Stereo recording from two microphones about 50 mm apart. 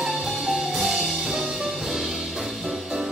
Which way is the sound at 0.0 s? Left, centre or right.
Centre.